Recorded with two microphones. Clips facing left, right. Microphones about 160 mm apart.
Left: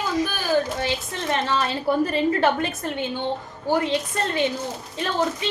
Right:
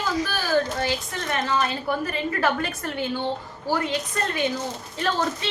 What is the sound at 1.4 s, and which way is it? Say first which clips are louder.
A woman's voice: even; 30° left (ahead or behind).